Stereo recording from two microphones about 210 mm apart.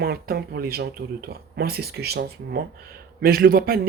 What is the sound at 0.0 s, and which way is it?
A man's voice, 45° right (ahead or behind).